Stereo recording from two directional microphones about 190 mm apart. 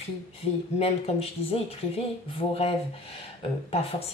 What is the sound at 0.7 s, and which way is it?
Speech, 30° left (ahead or behind).